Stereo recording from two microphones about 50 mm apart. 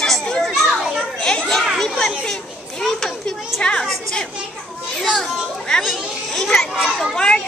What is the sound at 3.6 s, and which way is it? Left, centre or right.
Speech, centre.